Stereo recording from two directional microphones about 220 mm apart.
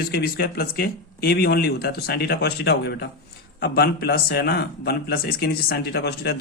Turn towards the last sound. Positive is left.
turn(degrees=45)  # may be behind; listen again after turning